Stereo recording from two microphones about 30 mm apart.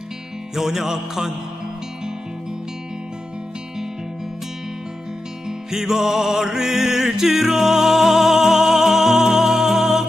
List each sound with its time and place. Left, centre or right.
0.6 s music: centre
5.7 s music: centre